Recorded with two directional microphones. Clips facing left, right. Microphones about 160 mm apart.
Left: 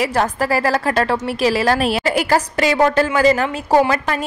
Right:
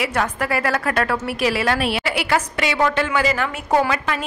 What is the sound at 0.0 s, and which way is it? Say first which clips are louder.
A woman's voice: left 4 dB; 35° left (ahead or behind).